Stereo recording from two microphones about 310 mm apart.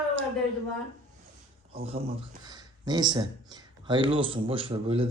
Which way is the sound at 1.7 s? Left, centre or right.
Right.